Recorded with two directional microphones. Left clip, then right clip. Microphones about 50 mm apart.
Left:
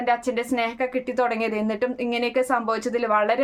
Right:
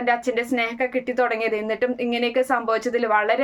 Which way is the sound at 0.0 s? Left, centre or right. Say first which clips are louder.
Right 1 dB; left.